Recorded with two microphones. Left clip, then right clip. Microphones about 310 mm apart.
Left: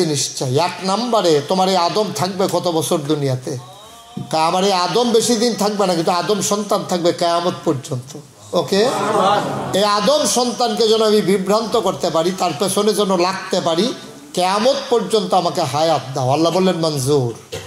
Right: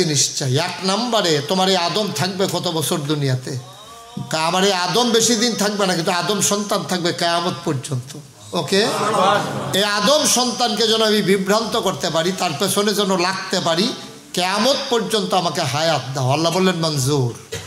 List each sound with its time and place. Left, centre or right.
0.0 s a man's voice: right